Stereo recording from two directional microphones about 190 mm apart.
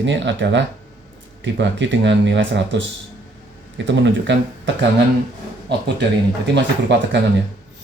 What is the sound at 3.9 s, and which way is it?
Speech, 70° right (ahead or behind).